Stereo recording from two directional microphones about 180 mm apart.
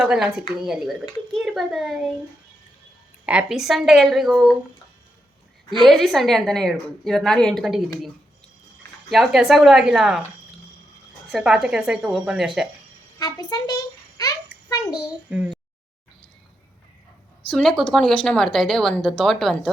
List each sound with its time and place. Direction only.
0.0 s a woman's voice: 5° right (ahead or behind)
3.2 s a woman's voice: 5° right (ahead or behind)
5.8 s a woman's voice: centre (ahead or behind)
9.0 s a woman's voice: centre (ahead or behind)
11.3 s a woman's voice: centre (ahead or behind)
13.1 s a sound: 20° left (ahead or behind)
14.8 s a woman's voice: 5° right (ahead or behind)
17.5 s a woman's voice: 5° left (ahead or behind)